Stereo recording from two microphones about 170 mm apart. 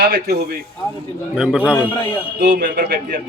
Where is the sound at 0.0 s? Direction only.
60° right (ahead or behind).